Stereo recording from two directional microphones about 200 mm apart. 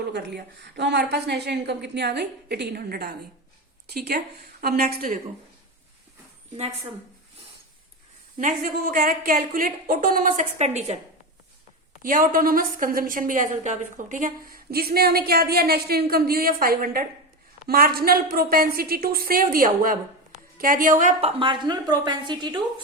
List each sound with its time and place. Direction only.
0.1 s a woman's voice: 55° right (ahead or behind)
8.4 s a woman's voice: 45° right (ahead or behind)
12.0 s a woman's voice: 45° right (ahead or behind); by 22.6 s 20° right (ahead or behind)